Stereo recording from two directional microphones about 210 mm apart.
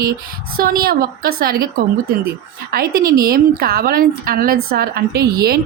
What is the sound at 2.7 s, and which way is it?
A woman's voice, 45° right (ahead or behind).